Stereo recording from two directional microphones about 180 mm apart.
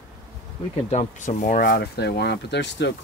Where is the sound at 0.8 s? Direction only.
40° left (ahead or behind).